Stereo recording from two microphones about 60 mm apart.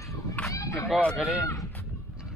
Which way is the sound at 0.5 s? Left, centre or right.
Left.